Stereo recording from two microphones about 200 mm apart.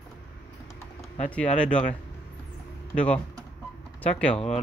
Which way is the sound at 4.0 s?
5° left (ahead or behind).